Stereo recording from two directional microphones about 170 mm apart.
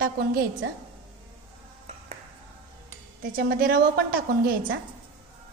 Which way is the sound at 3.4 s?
60° right (ahead or behind).